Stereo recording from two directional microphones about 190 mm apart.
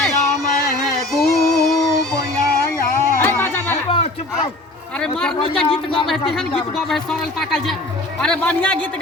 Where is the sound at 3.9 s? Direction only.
30° left (ahead or behind).